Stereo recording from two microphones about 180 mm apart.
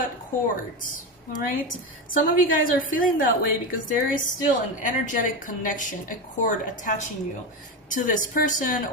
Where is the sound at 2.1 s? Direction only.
50° left (ahead or behind).